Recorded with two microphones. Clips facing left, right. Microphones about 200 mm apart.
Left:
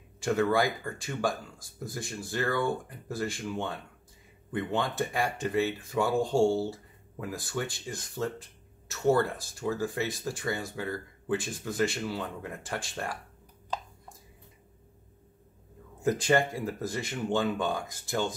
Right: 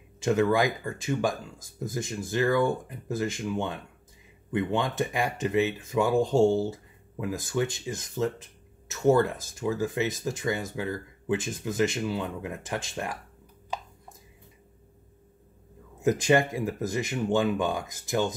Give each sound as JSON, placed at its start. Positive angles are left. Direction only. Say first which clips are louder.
{"t": 0.2, "sound": "speech", "louder": "right 3 dB", "side_deg": -20}
{"t": 16.0, "sound": "speech", "louder": "right 3 dB", "side_deg": -20}